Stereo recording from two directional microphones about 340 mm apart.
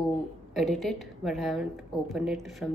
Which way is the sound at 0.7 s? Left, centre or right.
Centre.